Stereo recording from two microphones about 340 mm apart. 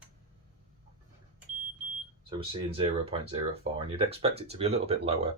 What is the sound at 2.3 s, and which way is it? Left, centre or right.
Speech, centre.